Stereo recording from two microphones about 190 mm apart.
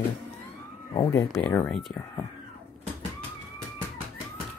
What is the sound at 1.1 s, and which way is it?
Speech, 20° left (ahead or behind).